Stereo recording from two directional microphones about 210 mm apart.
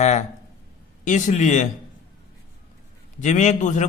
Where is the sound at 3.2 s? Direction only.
35° left (ahead or behind).